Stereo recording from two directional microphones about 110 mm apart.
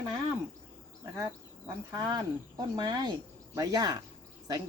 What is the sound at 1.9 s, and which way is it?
Speech, 40° right (ahead or behind).